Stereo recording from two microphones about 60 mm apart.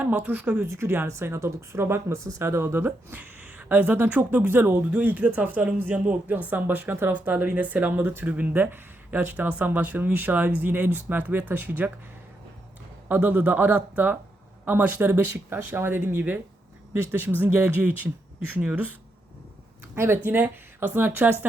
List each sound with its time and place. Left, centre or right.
0.0 s speech: right
0.6 s speech: right
3.1 s speech: right
7.3 s speech: right
13.1 s speech: right
18.6 s speech: centre
20.2 s speech: right